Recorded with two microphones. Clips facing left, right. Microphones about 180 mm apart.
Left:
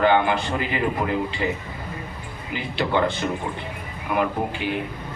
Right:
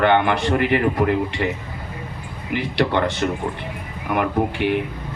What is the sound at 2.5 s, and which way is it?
Speech, 70° right (ahead or behind).